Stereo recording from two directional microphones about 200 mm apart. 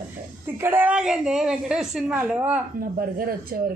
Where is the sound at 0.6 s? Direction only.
10° right (ahead or behind).